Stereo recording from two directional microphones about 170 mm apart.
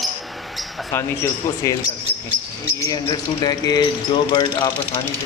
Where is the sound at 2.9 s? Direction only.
25° left (ahead or behind).